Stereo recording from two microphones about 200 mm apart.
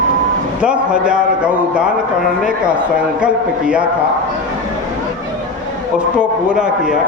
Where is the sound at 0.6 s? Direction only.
5° right (ahead or behind).